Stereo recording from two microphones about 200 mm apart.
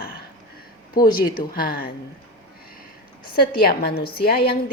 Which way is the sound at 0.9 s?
45° left (ahead or behind).